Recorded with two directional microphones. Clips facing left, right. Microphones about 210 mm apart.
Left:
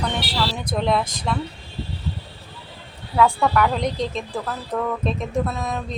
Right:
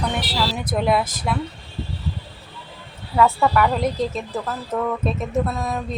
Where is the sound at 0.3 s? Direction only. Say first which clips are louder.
Right 2 dB; 5° right (ahead or behind).